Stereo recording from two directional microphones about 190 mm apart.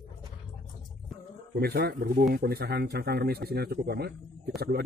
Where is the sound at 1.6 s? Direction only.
55° right (ahead or behind).